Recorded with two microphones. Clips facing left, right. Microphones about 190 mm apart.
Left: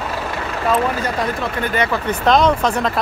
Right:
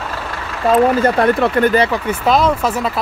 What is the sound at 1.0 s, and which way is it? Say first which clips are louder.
Speech: right 8 dB; 60° right (ahead or behind).